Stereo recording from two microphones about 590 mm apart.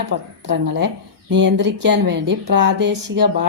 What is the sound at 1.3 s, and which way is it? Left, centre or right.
Speech, centre.